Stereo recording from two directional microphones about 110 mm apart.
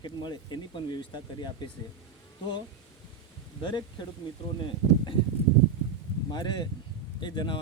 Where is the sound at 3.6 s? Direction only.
45° left (ahead or behind).